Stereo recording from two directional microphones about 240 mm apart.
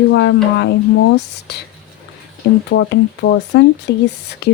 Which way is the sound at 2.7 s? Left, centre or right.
Left.